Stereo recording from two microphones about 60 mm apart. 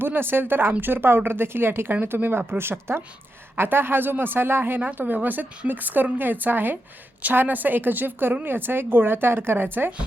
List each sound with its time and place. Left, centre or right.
0.0 s speech: right
4.8 s speech: right